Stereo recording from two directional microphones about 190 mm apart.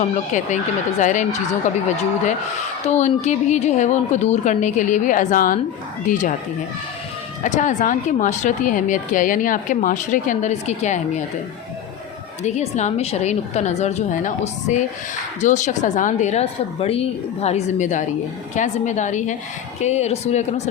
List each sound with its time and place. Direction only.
0.0 s speech: 40° left (ahead or behind)
7.4 s speech: 40° left (ahead or behind)
12.4 s speech: 35° left (ahead or behind)